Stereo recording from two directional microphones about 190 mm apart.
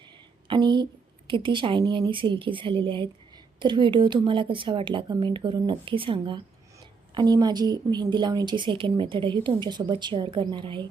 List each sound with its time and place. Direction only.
0.4 s speech: 25° right (ahead or behind)